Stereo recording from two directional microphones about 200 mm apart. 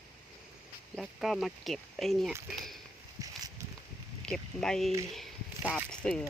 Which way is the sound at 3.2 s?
15° right (ahead or behind).